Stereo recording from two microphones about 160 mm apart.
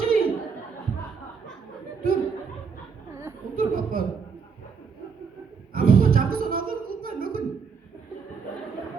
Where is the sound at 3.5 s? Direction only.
65° right (ahead or behind).